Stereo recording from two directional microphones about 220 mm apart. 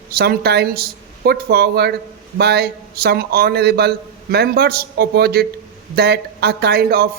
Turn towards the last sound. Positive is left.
turn(degrees=-45)  # may be behind; listen again after turning